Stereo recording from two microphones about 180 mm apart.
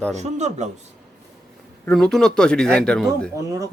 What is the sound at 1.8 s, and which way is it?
Speech, centre (ahead or behind).